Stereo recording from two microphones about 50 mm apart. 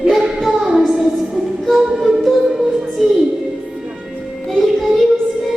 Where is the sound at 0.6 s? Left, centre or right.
Centre.